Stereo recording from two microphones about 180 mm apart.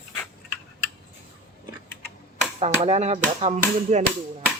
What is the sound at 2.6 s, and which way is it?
Speech, 35° right (ahead or behind).